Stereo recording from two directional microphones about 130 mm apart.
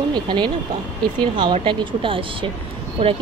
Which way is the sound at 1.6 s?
40° right (ahead or behind).